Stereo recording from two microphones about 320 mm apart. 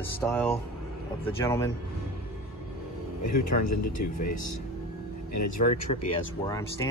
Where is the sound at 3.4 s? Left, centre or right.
Left.